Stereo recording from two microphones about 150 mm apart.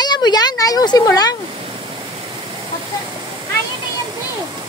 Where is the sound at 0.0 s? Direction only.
25° left (ahead or behind).